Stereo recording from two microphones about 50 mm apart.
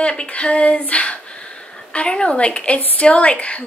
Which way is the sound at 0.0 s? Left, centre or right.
Left.